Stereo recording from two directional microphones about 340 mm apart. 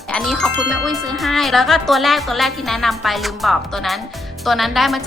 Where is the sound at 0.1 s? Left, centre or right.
Centre.